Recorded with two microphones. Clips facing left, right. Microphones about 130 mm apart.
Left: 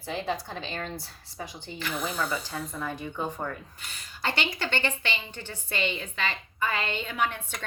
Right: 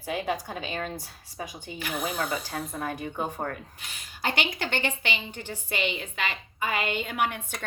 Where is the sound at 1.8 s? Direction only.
55° right (ahead or behind).